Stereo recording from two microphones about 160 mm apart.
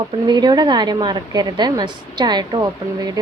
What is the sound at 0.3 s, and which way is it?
A woman's voice, 25° right (ahead or behind).